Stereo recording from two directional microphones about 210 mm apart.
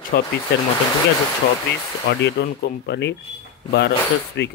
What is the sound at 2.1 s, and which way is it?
Speech, 55° left (ahead or behind).